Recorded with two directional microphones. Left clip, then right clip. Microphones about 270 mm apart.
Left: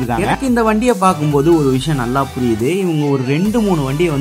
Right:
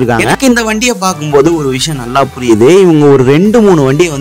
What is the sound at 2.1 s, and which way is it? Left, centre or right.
Speech, right.